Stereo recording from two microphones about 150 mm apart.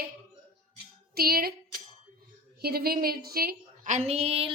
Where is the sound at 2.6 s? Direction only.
90° right.